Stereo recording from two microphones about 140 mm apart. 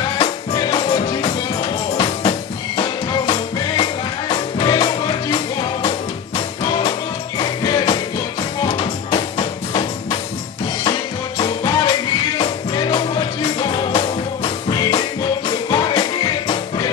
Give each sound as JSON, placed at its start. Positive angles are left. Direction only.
{"t": 0.2, "sound": "music", "side_deg": 35}
{"t": 7.3, "sound": "music", "side_deg": 35}